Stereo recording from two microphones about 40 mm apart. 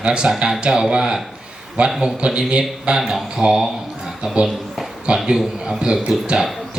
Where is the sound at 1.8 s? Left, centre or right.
Right.